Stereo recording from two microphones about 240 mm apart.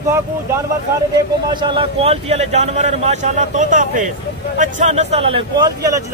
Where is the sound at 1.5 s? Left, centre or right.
Right.